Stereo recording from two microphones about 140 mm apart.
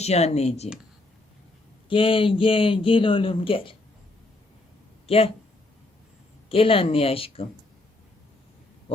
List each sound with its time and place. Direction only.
0.0 s speech: 50° left (ahead or behind)
1.9 s speech: 40° left (ahead or behind)
5.0 s speech: 45° left (ahead or behind)
6.5 s speech: 40° left (ahead or behind)